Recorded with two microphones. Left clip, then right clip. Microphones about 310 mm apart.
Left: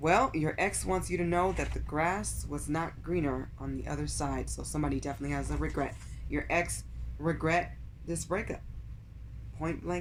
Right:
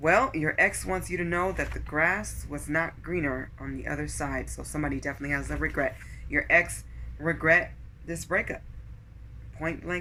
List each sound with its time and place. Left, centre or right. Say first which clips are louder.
0.0 s speech: right 4 dB; centre
9.6 s speech: right 3 dB; centre